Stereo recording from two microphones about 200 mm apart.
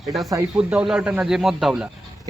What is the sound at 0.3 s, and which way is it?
Speech, 10° right (ahead or behind).